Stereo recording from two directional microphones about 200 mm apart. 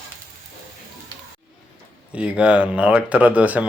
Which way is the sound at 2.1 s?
5° right (ahead or behind).